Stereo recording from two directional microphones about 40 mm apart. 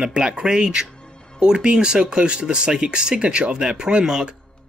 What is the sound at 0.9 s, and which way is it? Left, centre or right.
Music, left.